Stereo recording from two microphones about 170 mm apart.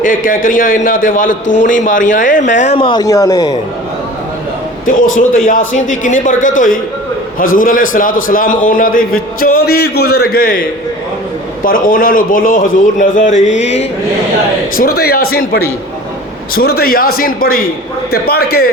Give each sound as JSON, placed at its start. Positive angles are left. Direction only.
{"t": 0.0, "sound": "a man's voice", "side_deg": 50}
{"t": 2.7, "sound": "speech", "side_deg": 30}
{"t": 4.9, "sound": "a man's voice", "side_deg": 50}
{"t": 9.4, "sound": "a man's voice", "side_deg": 65}
{"t": 13.5, "sound": "mantra", "side_deg": 40}
{"t": 14.8, "sound": "a man's voice", "side_deg": 65}